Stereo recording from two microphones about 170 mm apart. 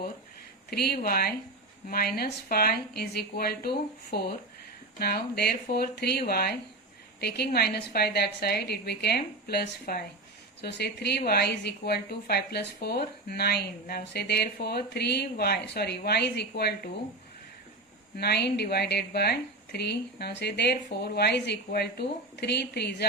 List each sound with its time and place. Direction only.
0.7 s a woman's voice: 65° left (ahead or behind)
10.6 s speech: 80° left
18.2 s speech: 75° left (ahead or behind)